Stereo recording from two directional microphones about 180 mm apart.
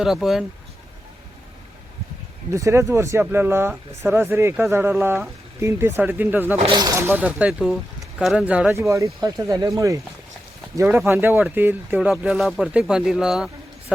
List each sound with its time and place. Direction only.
0.0 s speech: centre (ahead or behind)
2.5 s speech: 15° right (ahead or behind)
6.6 s speech: 25° right (ahead or behind); by 13.5 s 5° right (ahead or behind)